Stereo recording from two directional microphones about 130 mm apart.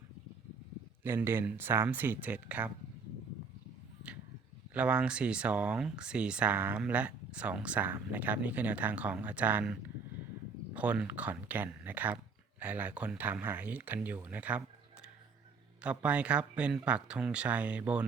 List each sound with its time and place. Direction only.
1.0 s speech: 20° right (ahead or behind)
4.7 s speech: 10° right (ahead or behind)
10.8 s speech: 10° right (ahead or behind)
16.0 s speech: 10° right (ahead or behind)